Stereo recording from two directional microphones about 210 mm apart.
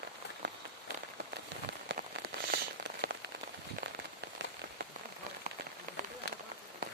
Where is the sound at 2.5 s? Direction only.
55° right (ahead or behind).